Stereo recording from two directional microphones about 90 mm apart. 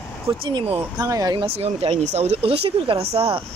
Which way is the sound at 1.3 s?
85° right.